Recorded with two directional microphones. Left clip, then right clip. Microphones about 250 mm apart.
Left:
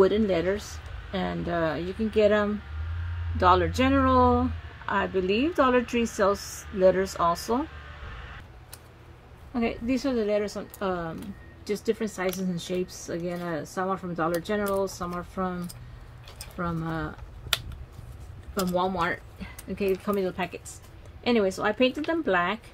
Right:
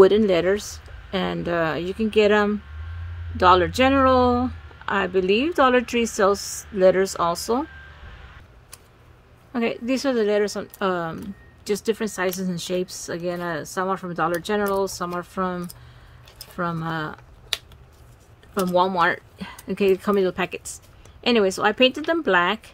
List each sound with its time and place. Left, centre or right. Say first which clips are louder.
0.0 s speech: right 7 dB; right
9.5 s speech: right 4 dB; right
18.5 s speech: right 7 dB; right